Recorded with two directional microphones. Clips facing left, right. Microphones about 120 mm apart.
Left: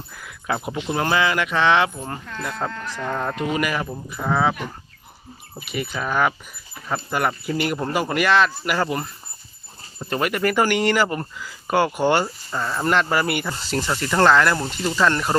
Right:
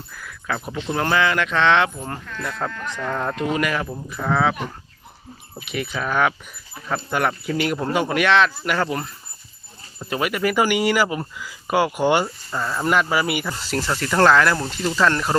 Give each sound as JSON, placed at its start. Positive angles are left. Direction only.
{"t": 0.1, "sound": "speech", "side_deg": 20}
{"t": 2.6, "sound": "speech", "side_deg": 30}
{"t": 3.1, "sound": "speech", "side_deg": 5}
{"t": 5.5, "sound": "speech", "side_deg": 0}
{"t": 12.2, "sound": "speech", "side_deg": 0}